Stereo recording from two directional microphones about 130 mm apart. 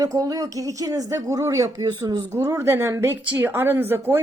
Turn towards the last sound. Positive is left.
turn(degrees=-15)  # may be behind; listen again after turning